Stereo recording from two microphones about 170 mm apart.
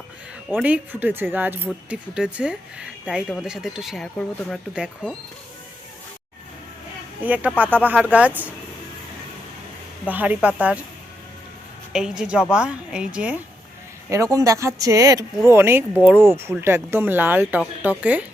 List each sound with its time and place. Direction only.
0.5 s speech: 10° right (ahead or behind)
7.2 s speech: 10° right (ahead or behind)
10.1 s speech: 10° right (ahead or behind)
11.9 s speech: 5° right (ahead or behind)
14.1 s speech: 20° right (ahead or behind)